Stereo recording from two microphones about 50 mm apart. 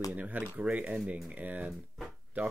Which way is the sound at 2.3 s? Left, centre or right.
Right.